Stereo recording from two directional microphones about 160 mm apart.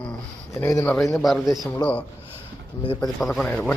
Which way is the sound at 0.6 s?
15° left (ahead or behind).